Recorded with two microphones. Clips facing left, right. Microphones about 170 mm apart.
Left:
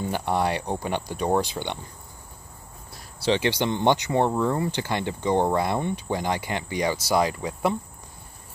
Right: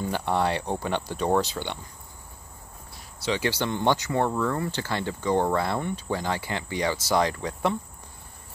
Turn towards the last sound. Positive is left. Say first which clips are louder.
# left 1 dB
turn(degrees=10)  # may be behind; listen again after turning